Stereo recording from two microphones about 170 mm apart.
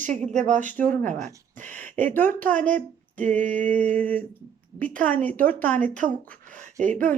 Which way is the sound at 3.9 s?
10° left (ahead or behind).